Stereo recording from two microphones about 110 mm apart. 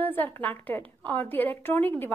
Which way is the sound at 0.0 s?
15° left (ahead or behind).